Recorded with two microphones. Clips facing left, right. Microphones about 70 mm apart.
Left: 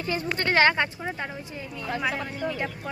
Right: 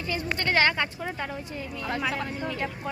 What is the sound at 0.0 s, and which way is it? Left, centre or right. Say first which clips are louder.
Speech: left 2 dB; left.